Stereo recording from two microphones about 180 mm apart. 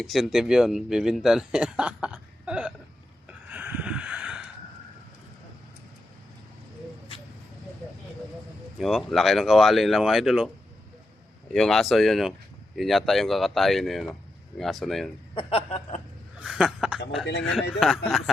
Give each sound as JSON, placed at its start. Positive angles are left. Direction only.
{"t": 0.0, "sound": "speech", "side_deg": 0}
{"t": 3.5, "sound": "a sound", "side_deg": -10}
{"t": 8.8, "sound": "speech", "side_deg": 0}
{"t": 11.5, "sound": "speech", "side_deg": 0}
{"t": 15.4, "sound": "speech", "side_deg": 30}
{"t": 16.4, "sound": "speech", "side_deg": -5}
{"t": 17.2, "sound": "speech", "side_deg": 80}
{"t": 17.5, "sound": "speech", "side_deg": 0}